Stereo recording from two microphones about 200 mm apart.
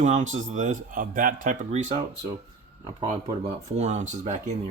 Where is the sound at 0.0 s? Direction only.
35° right (ahead or behind).